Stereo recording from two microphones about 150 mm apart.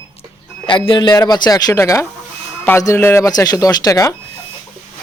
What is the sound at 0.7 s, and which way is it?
A man's voice, 35° left (ahead or behind).